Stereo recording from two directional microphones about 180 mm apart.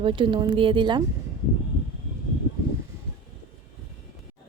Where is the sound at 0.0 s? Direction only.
30° right (ahead or behind).